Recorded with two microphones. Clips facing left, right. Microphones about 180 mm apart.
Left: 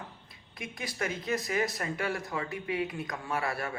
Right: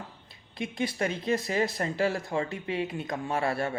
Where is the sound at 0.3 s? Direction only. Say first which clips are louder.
Right 7 dB; 25° right (ahead or behind).